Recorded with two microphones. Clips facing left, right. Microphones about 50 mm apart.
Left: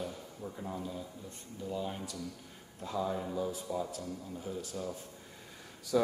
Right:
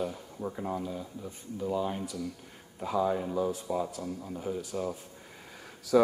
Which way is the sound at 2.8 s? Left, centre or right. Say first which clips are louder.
Right 6 dB; centre.